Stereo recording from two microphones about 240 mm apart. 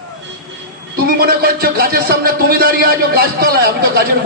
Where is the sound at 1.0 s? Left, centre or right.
Right.